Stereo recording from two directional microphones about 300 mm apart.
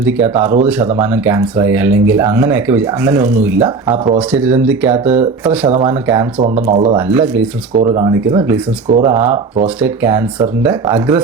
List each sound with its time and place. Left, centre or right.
0.0 s speech: centre
6.7 s speech: right
7.1 s speech: centre